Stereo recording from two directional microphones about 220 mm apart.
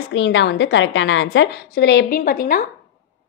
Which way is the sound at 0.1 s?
55° left (ahead or behind).